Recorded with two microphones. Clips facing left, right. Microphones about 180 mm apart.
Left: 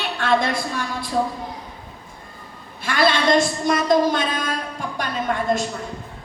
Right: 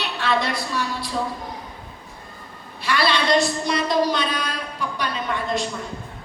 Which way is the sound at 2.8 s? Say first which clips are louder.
Left 3 dB; 50° left (ahead or behind).